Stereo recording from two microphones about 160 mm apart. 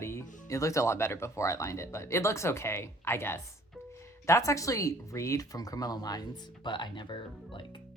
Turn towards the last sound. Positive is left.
turn(degrees=30)  # may be behind; listen again after turning